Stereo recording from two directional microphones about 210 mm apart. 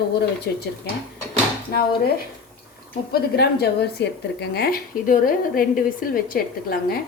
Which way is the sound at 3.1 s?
50° left (ahead or behind).